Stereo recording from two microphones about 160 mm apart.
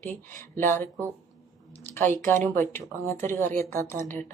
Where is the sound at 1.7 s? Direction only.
15° left (ahead or behind).